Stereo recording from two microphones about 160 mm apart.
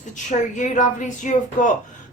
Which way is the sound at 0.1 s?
50° left (ahead or behind).